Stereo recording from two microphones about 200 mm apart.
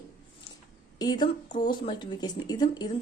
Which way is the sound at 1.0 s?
20° left (ahead or behind).